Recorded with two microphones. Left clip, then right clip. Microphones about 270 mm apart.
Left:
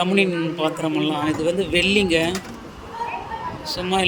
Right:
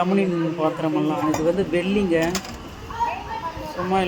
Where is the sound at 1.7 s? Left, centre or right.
Left.